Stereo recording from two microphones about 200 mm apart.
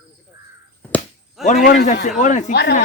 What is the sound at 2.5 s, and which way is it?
Speech, 60° left (ahead or behind).